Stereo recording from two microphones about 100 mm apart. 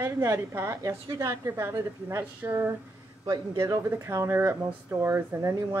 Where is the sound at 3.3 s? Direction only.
40° right (ahead or behind).